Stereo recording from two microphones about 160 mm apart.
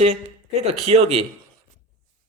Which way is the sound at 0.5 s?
40° right (ahead or behind).